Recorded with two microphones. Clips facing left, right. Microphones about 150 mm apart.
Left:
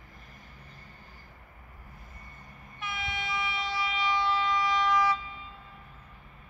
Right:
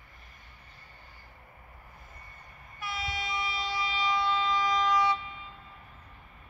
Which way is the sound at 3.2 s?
Centre (ahead or behind).